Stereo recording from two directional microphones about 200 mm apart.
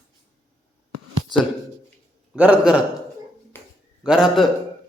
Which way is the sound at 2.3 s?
5° right (ahead or behind).